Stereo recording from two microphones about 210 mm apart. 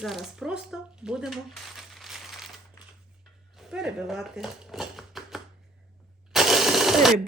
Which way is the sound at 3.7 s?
5° right (ahead or behind).